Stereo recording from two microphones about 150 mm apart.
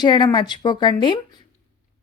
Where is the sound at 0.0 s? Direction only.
30° left (ahead or behind).